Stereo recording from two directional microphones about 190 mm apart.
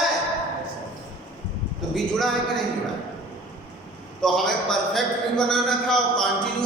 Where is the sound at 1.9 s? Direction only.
Centre (ahead or behind).